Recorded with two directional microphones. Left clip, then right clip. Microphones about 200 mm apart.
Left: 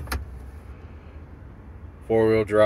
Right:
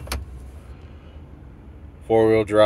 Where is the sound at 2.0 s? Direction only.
25° right (ahead or behind).